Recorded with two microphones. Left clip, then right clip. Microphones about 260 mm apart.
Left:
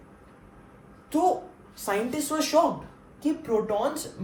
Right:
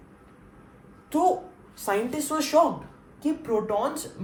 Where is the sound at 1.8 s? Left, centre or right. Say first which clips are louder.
Right 1 dB; right.